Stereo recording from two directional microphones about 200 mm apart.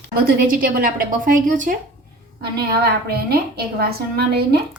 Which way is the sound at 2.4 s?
50° right (ahead or behind).